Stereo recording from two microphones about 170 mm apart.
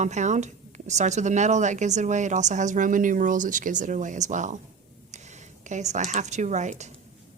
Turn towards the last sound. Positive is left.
turn(degrees=-45)  # may be behind; listen again after turning